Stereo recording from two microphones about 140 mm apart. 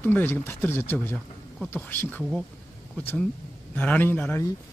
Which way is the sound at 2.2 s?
Centre (ahead or behind).